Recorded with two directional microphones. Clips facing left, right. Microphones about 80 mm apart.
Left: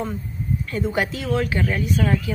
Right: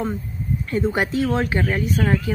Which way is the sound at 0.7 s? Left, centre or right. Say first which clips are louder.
Right 3 dB; right.